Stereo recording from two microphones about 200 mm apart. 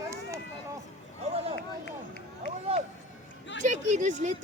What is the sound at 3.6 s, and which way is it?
Speech, 40° right (ahead or behind).